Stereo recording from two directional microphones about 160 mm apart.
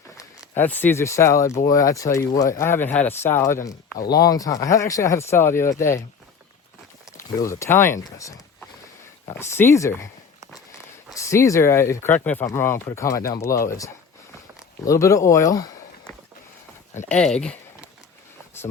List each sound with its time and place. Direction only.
0.2 s speech: 15° left (ahead or behind)
7.2 s speech: 15° left (ahead or behind)
9.4 s speech: 15° left (ahead or behind)
11.1 s speech: 20° left (ahead or behind)
17.1 s speech: 5° left (ahead or behind)